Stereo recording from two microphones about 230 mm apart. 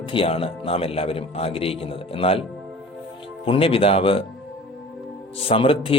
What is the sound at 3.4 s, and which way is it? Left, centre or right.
Speech, left.